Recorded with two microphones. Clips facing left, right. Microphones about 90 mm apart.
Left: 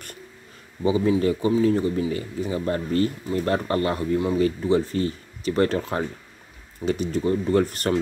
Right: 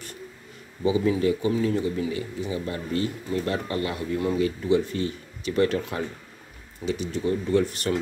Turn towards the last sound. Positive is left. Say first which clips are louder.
# left 2 dB
turn(degrees=45)  # may be behind; listen again after turning